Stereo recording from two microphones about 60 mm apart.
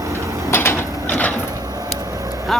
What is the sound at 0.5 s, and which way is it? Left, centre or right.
Mechanisms, left.